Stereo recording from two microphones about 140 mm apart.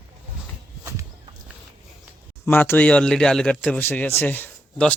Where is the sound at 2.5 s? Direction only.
15° left (ahead or behind).